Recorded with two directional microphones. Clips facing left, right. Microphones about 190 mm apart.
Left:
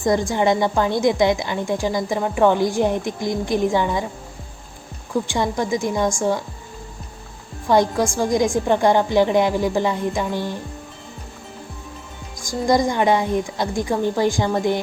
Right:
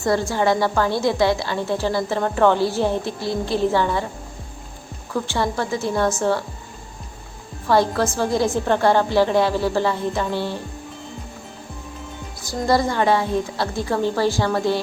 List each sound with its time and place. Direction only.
0.0 s a woman's voice: 15° left (ahead or behind)
5.3 s a woman's voice: 15° left (ahead or behind)
7.7 s a woman's voice: 15° left (ahead or behind)
12.4 s a woman's voice: 15° left (ahead or behind)